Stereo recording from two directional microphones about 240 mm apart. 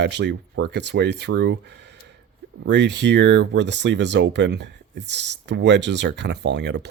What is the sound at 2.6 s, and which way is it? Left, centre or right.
Speech, right.